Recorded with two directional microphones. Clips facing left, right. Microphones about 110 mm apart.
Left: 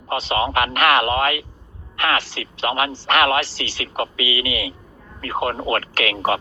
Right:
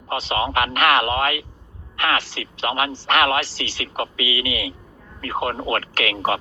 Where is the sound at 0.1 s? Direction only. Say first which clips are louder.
Left 2 dB; 60° left (ahead or behind).